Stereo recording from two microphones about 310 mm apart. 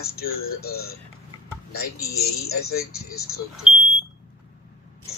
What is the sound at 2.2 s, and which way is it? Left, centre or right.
Speech, left.